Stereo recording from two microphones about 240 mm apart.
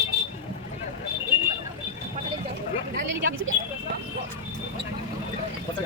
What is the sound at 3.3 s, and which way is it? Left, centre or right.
Vehicle, right.